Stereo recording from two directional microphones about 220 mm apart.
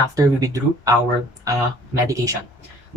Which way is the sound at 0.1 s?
15° right (ahead or behind).